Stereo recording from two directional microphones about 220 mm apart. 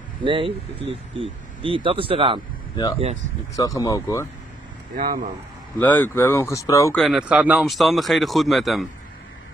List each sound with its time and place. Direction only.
0.2 s speech: 25° right (ahead or behind)
3.5 s speech: 15° left (ahead or behind)
4.9 s speech: 40° right (ahead or behind)
5.8 s speech: 10° left (ahead or behind)
7.0 s speech: centre (ahead or behind)